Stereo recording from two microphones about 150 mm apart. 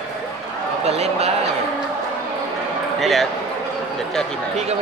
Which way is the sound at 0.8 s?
45° right (ahead or behind).